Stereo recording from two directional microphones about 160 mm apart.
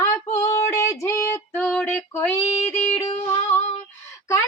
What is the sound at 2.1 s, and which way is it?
Female singing, 15° left (ahead or behind).